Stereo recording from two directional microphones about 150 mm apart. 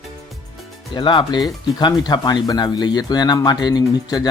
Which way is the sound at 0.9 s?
30° left (ahead or behind).